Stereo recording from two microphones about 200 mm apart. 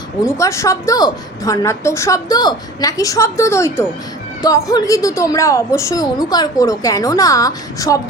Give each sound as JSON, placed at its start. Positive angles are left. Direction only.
{"t": 0.3, "sound": "a woman's voice", "side_deg": 15}